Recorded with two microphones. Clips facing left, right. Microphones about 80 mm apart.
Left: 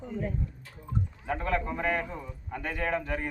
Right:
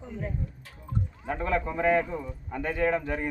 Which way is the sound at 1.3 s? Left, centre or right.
Right.